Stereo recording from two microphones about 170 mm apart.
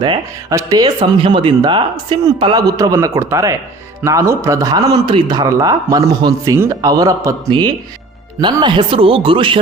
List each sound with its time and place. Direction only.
0.0 s speech: 25° right (ahead or behind)